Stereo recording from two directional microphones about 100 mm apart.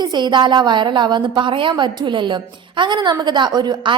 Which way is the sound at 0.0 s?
45° right (ahead or behind).